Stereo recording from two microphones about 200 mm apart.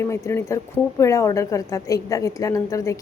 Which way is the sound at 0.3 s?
15° left (ahead or behind).